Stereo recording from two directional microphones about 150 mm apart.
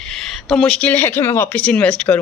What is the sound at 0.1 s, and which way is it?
Speech, centre (ahead or behind).